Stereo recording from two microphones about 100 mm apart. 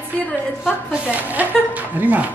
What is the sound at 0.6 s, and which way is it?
Speech, 10° right (ahead or behind).